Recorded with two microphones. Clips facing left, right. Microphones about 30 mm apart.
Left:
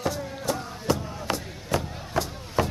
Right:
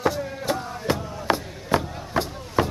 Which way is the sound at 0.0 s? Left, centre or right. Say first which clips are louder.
Right 4 dB; right.